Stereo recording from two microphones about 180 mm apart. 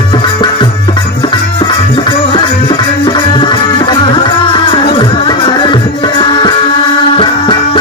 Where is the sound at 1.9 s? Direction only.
25° left (ahead or behind).